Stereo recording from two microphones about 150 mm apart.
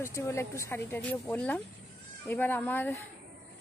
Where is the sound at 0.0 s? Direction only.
20° left (ahead or behind).